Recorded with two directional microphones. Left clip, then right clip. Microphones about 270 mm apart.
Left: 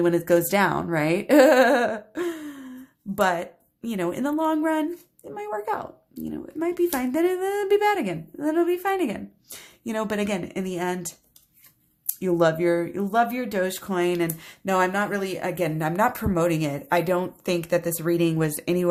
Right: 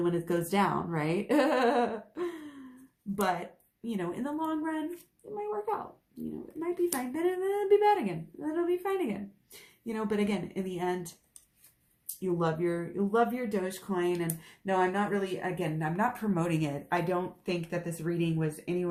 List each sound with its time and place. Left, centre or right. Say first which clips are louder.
0.0 s speech: left 10 dB; left
12.2 s speech: left 9 dB; left